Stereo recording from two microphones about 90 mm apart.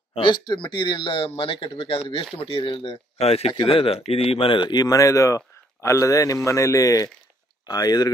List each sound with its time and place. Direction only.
0.1 s speech: 60° left (ahead or behind); by 1.7 s 80° left
1.8 s speech: 90° left; by 4.7 s 70° left (ahead or behind)
4.7 s a man's voice: 40° left (ahead or behind)